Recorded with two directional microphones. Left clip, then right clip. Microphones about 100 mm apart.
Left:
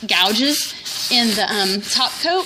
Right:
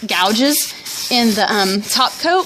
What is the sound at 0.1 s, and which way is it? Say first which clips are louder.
A woman's voice: right 1 dB; 45° right (ahead or behind).